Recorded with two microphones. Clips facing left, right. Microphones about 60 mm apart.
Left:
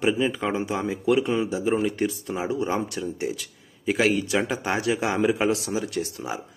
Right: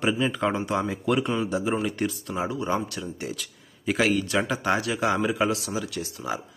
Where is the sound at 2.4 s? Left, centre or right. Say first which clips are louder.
Left 2 dB; left.